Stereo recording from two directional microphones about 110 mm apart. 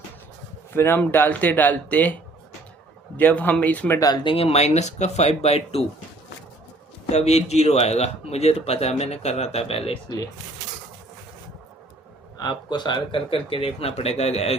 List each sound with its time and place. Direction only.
0.7 s speech: 20° left (ahead or behind)
3.2 s speech: 15° left (ahead or behind)
4.0 s speech: 45° left (ahead or behind); by 5.8 s 70° left (ahead or behind)
7.1 s speech: 90° left; by 10.0 s 60° left (ahead or behind)
12.4 s speech: 40° left (ahead or behind); by 14.5 s 75° left (ahead or behind)